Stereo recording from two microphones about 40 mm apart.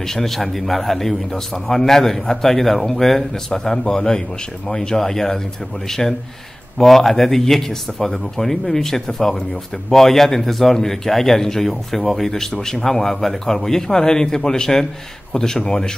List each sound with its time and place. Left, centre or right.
0.0 s a man's voice: centre